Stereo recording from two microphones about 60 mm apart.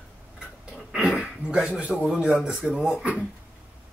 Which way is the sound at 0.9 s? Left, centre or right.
Centre.